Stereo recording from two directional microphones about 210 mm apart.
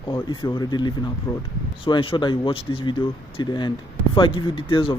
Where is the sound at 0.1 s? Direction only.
20° left (ahead or behind).